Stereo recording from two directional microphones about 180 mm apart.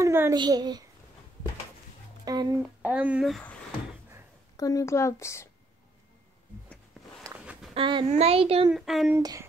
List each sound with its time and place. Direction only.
0.0 s a child's voice: 15° right (ahead or behind)
2.2 s speech: 25° right (ahead or behind)
2.9 s speech: 10° right (ahead or behind)
4.6 s speech: 20° left (ahead or behind)
7.7 s a child's voice: 25° right (ahead or behind)
8.7 s speech: centre (ahead or behind)
9.1 s speech: 15° right (ahead or behind)